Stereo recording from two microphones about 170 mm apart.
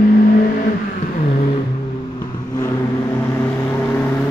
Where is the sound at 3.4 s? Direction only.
15° left (ahead or behind).